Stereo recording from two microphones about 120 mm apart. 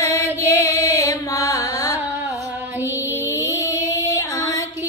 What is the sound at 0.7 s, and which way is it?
Carnatic music, 25° left (ahead or behind).